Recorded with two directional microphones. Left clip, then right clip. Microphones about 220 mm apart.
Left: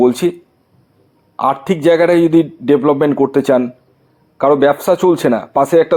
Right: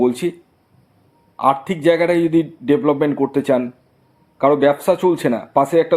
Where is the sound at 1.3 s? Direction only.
30° left (ahead or behind).